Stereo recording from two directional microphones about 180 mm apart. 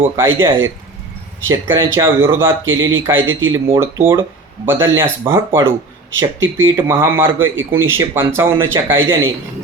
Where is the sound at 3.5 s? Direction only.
15° right (ahead or behind).